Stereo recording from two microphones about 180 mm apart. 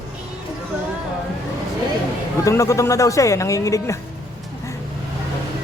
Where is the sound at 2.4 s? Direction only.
15° left (ahead or behind).